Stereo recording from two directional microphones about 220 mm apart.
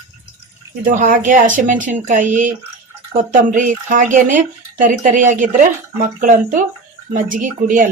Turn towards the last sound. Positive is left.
turn(degrees=-35)  # may be behind; listen again after turning